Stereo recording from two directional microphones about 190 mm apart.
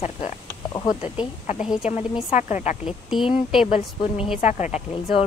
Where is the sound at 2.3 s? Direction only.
40° left (ahead or behind).